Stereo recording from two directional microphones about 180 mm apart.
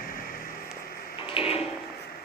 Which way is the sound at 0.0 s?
55° left (ahead or behind).